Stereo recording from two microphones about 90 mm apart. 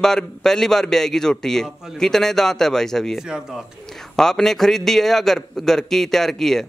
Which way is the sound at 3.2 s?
5° right (ahead or behind).